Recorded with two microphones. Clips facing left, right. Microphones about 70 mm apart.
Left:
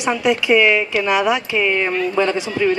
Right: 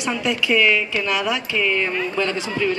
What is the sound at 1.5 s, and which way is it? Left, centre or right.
Speech, left.